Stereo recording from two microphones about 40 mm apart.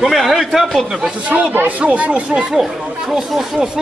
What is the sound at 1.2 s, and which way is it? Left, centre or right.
Speech, right.